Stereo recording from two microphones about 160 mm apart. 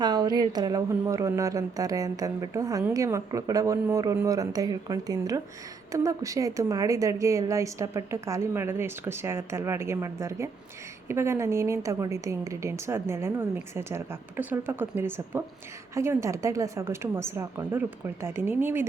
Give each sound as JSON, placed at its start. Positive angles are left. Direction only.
{"t": 0.0, "sound": "a woman's voice", "side_deg": -25}